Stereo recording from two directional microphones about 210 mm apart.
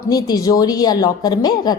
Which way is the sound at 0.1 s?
15° left (ahead or behind).